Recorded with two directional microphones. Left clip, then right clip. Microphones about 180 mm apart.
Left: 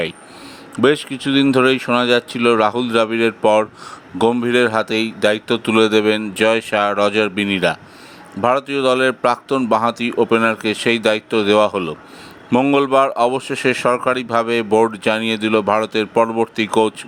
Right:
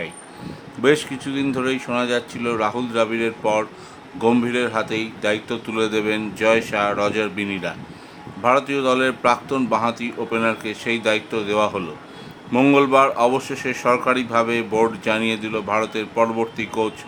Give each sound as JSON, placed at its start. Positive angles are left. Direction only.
{"t": 0.8, "sound": "speech", "side_deg": 40}
{"t": 12.5, "sound": "speech", "side_deg": 20}
{"t": 12.7, "sound": "speech", "side_deg": 40}